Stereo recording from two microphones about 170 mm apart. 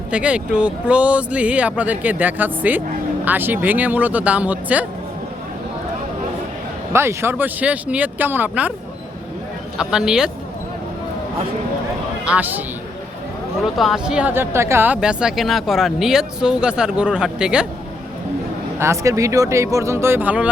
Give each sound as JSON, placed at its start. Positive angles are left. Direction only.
{"t": 0.1, "sound": "speech", "side_deg": -5}
{"t": 6.9, "sound": "speech", "side_deg": -15}
{"t": 9.7, "sound": "speech", "side_deg": -5}
{"t": 12.2, "sound": "speech", "side_deg": -10}
{"t": 13.7, "sound": "speech", "side_deg": 0}
{"t": 18.8, "sound": "speech", "side_deg": -15}